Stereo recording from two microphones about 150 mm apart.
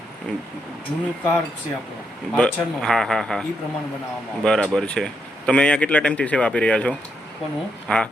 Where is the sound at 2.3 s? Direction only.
5° left (ahead or behind).